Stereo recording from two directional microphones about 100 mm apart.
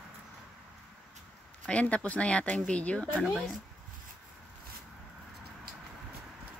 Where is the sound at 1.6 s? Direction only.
10° left (ahead or behind).